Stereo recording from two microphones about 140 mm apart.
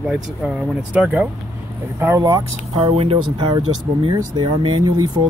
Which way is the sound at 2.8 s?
45° right (ahead or behind).